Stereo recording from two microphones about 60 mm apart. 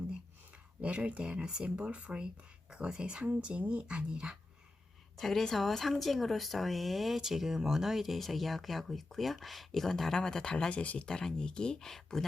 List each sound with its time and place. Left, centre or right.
0.8 s speech: centre
5.1 s speech: centre